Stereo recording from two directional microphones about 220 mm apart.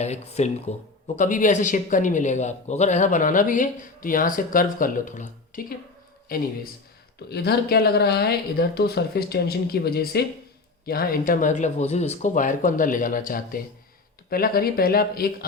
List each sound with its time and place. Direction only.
0.0 s a man's voice: 30° left (ahead or behind)
7.3 s a man's voice: 45° left (ahead or behind)